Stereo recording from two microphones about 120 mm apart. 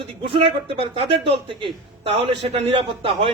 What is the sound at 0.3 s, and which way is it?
A man's voice, 50° right (ahead or behind).